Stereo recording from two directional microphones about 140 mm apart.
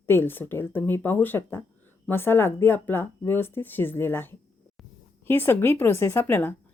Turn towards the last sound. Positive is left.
turn(degrees=15)  # may be behind; listen again after turning